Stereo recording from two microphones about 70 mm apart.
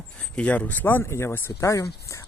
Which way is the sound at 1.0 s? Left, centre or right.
Left.